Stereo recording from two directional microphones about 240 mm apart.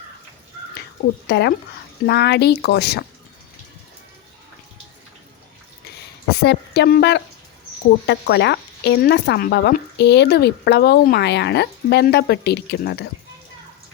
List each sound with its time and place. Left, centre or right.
1.3 s speech: left
6.4 s speech: left